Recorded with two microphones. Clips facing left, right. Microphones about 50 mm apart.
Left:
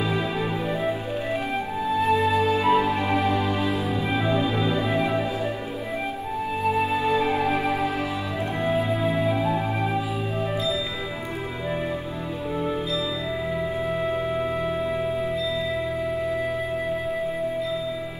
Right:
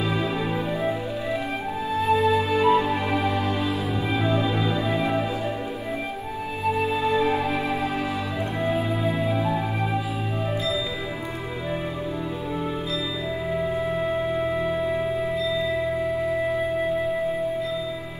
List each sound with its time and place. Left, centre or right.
0.0 s music: centre
1.9 s music: centre
6.6 s music: centre
13.6 s music: centre